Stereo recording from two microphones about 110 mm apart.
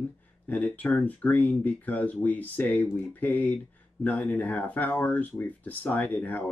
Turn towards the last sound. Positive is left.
turn(degrees=15)  # may be behind; listen again after turning